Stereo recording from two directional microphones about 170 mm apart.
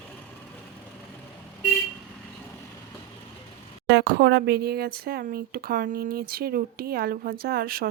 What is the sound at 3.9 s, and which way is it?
Speech, 90° right.